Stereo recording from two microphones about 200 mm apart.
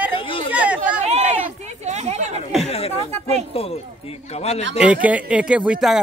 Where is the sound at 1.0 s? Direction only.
35° right (ahead or behind).